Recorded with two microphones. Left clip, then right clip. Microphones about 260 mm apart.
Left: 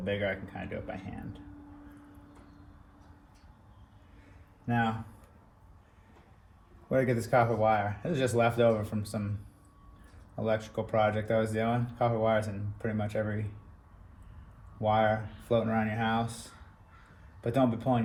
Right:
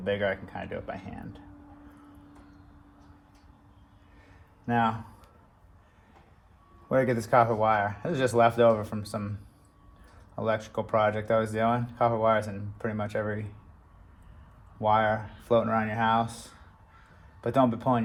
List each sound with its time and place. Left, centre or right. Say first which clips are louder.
0.0 s speech: right 4 dB; right
4.6 s speech: right 5 dB; right
7.0 s speech: right 4 dB; right
10.3 s speech: right 2 dB; right
14.8 s speech: right 3 dB; right